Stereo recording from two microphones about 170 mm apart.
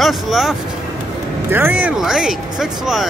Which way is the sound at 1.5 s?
10° right (ahead or behind).